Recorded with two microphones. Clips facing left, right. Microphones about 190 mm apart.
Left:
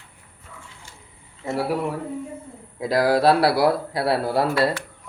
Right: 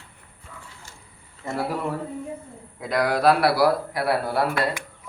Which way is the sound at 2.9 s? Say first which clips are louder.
Left 2 dB; 30° left (ahead or behind).